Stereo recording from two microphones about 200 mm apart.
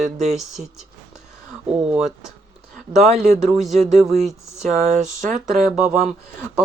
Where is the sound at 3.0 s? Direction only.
35° right (ahead or behind).